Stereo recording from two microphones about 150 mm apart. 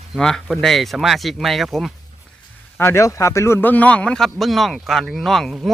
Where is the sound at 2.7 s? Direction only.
15° left (ahead or behind); by 5.7 s centre (ahead or behind).